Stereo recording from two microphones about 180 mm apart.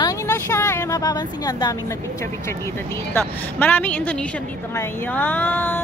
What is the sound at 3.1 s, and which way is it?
A woman's voice, 10° left (ahead or behind).